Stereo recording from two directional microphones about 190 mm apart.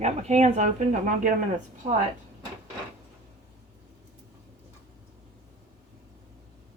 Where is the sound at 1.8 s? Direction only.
45° right (ahead or behind).